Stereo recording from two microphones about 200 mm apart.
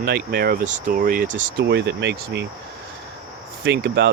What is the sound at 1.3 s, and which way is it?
Speech, 60° right (ahead or behind).